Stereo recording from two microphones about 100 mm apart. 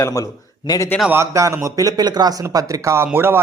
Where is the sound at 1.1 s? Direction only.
30° right (ahead or behind).